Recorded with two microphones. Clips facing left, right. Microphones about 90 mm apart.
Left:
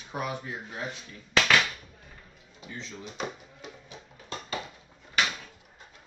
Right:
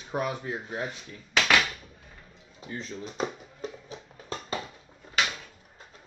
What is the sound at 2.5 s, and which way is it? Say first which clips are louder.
Music: right 4 dB; 40° right (ahead or behind).